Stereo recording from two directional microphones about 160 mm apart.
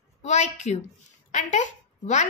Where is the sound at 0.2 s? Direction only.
45° left (ahead or behind).